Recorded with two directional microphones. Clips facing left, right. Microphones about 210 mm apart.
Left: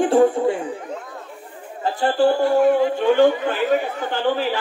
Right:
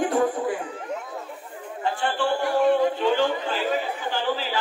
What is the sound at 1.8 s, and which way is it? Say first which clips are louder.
Speech: left 8 dB; 40° left (ahead or behind).